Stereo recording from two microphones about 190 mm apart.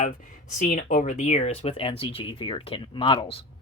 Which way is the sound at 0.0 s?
45° left (ahead or behind).